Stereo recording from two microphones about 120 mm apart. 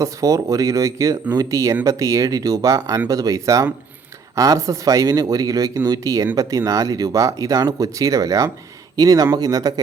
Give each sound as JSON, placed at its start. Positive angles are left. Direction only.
{"t": 0.0, "sound": "speech", "side_deg": -30}